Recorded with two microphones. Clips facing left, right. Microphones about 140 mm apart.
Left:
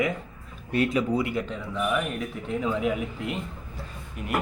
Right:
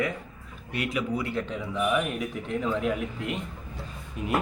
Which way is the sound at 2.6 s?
5° left (ahead or behind).